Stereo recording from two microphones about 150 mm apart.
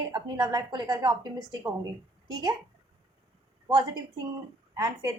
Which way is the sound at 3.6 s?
25° right (ahead or behind).